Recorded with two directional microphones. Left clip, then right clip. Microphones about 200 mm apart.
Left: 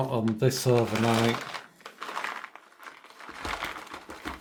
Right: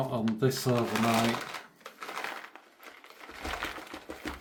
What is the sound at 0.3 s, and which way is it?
Speech, 45° left (ahead or behind).